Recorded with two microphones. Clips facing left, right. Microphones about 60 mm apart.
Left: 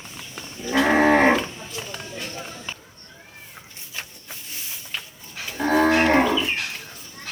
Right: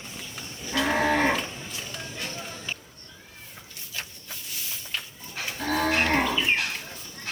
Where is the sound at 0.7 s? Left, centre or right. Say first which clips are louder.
Left 7 dB; left.